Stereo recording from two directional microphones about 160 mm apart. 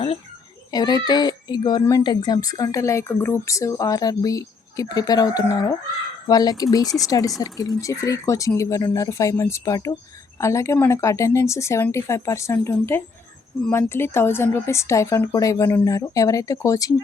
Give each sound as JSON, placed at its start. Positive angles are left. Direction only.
{"t": 0.7, "sound": "a child's voice", "side_deg": 25}